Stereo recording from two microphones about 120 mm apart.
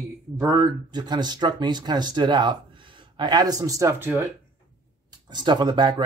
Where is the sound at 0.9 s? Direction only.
35° right (ahead or behind); by 4.2 s 20° right (ahead or behind).